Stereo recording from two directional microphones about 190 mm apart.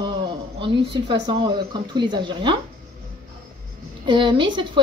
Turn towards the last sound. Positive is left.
turn(degrees=-25)  # may be behind; listen again after turning